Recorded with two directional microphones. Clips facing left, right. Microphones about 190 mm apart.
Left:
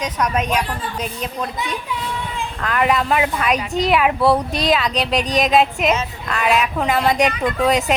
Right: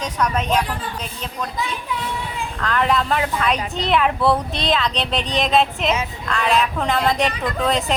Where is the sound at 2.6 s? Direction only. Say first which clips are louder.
Left 1 dB; 10° left (ahead or behind).